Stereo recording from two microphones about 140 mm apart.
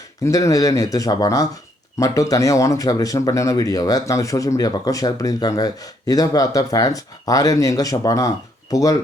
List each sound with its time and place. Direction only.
0.3 s speech: 25° left (ahead or behind)